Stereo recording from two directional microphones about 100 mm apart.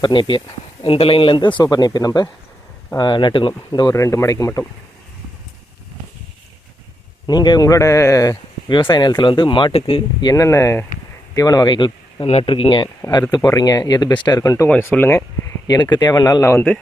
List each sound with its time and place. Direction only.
0.0 s speech: 55° left (ahead or behind)
3.9 s speech: 30° left (ahead or behind)
7.3 s speech: 45° left (ahead or behind)
8.7 s speech: 50° left (ahead or behind)
9.7 s speech: 65° left (ahead or behind)
10.2 s speech: 40° left (ahead or behind)
12.3 s speech: 70° left (ahead or behind); by 12.9 s 55° left (ahead or behind)
13.5 s speech: 40° left (ahead or behind)
14.7 s speech: 20° left (ahead or behind)
15.6 s speech: 45° left (ahead or behind)
16.4 s speech: 25° left (ahead or behind)